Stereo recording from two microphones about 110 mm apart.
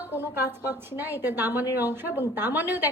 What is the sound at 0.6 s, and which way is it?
A woman's voice, 20° right (ahead or behind).